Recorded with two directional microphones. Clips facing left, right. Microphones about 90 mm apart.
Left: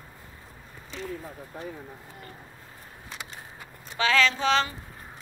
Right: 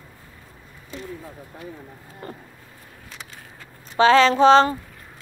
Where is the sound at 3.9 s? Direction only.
35° right (ahead or behind).